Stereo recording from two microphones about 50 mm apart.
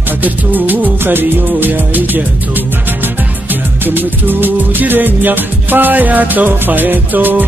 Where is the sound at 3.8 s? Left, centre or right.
Right.